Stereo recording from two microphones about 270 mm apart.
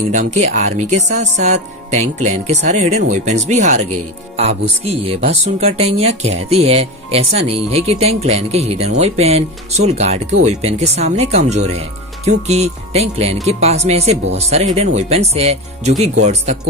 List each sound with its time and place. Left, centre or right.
0.1 s speech: right
4.8 s speech: right